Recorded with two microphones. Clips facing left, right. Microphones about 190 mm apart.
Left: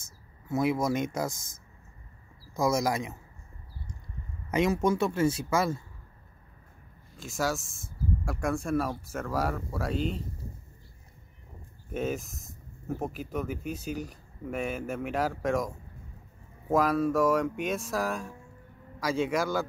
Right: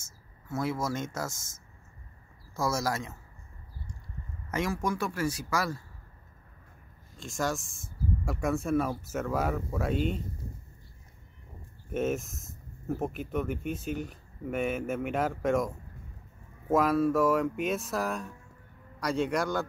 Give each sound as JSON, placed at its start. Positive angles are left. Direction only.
{"t": 0.0, "sound": "speech", "side_deg": 15}
{"t": 2.5, "sound": "speech", "side_deg": 15}
{"t": 4.5, "sound": "speech", "side_deg": 20}
{"t": 7.2, "sound": "speech", "side_deg": 5}
{"t": 11.9, "sound": "speech", "side_deg": 0}